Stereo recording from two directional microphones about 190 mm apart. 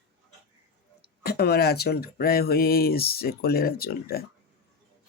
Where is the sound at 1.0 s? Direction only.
55° left (ahead or behind).